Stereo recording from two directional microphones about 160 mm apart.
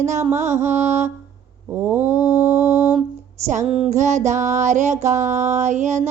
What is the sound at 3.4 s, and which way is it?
Mantra, 45° right (ahead or behind).